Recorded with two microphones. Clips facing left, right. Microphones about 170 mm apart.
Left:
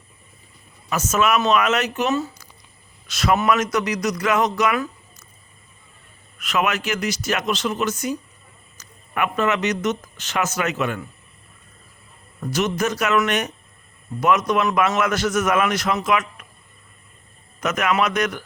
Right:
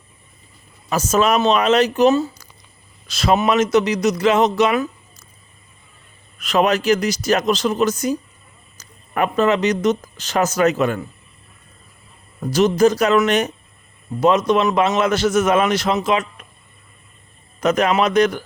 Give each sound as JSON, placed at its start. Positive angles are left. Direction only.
{"t": 0.9, "sound": "a man's voice", "side_deg": -35}
{"t": 6.4, "sound": "speech", "side_deg": -35}
{"t": 12.4, "sound": "a man's voice", "side_deg": -35}
{"t": 17.6, "sound": "speech", "side_deg": -35}